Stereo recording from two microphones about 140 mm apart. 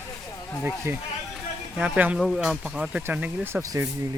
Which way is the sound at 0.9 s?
15° right (ahead or behind).